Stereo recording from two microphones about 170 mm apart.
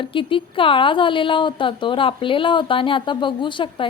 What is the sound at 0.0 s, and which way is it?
A woman's voice, 30° left (ahead or behind).